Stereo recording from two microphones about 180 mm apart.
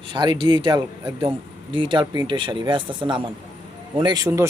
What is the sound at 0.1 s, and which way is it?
A man's voice, 25° right (ahead or behind).